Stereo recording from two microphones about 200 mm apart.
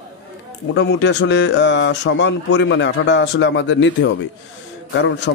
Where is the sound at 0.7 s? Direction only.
60° left (ahead or behind).